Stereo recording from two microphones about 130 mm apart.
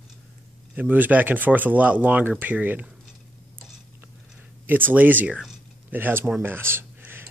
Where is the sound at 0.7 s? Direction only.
15° right (ahead or behind).